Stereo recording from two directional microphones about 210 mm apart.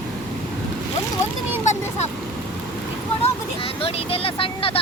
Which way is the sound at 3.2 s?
25° left (ahead or behind).